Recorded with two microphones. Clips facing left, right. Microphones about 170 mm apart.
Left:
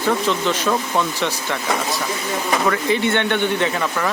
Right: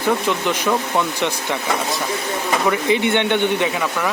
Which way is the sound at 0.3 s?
15° right (ahead or behind).